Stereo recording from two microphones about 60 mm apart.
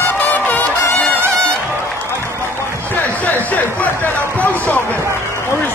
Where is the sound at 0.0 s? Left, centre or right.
Left.